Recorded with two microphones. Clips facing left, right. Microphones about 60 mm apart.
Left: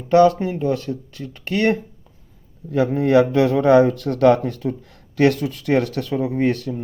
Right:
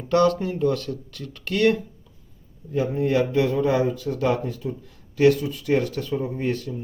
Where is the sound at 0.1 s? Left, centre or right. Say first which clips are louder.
Left 6 dB; left.